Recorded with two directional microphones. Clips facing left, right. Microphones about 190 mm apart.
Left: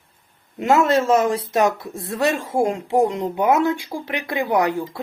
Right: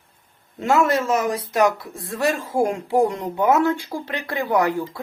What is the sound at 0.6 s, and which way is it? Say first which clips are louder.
A woman's voice: left 2 dB; 20° left (ahead or behind).